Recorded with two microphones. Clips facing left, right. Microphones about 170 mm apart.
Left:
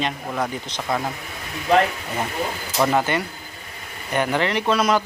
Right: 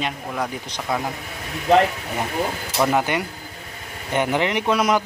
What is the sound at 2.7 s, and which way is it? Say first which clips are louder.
Speech: even; 10° right (ahead or behind).